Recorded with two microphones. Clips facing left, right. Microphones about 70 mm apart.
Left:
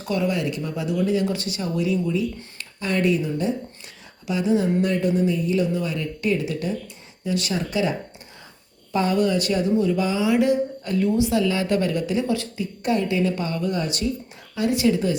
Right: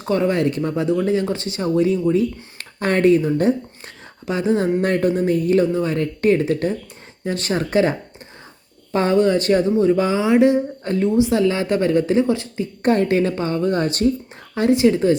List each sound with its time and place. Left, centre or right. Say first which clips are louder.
0.0 s speech: right 5 dB; right
12.8 s speech: right 5 dB; right
13.3 s speech: right 5 dB; right
14.5 s speech: right 5 dB; right